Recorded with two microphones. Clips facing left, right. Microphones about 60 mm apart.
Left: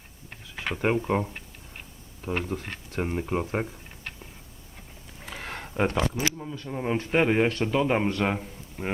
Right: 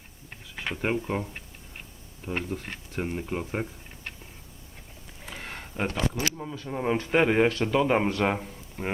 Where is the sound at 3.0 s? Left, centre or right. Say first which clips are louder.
Left 3 dB; left.